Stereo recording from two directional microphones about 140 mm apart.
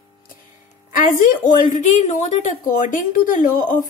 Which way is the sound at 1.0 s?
70° left (ahead or behind).